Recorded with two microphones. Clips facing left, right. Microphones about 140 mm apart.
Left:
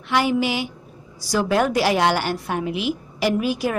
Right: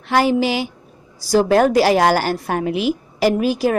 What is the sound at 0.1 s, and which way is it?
A woman's voice, 35° right (ahead or behind).